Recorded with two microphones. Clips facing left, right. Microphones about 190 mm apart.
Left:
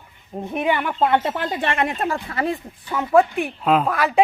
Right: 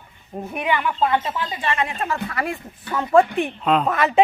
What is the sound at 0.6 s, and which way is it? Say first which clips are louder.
Speech: left 1 dB; 50° left (ahead or behind).